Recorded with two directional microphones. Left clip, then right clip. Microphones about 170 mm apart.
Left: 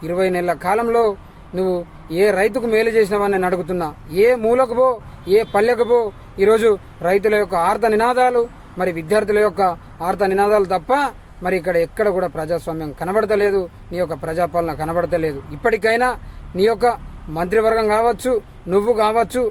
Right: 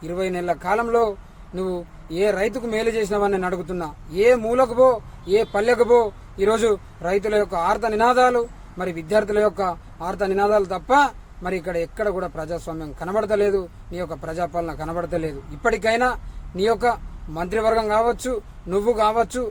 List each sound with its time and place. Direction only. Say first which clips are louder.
0.0 s speech: left 7 dB; 15° left (ahead or behind)